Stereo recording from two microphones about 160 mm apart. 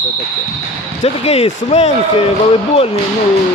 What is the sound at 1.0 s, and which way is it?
A man's voice, 40° left (ahead or behind).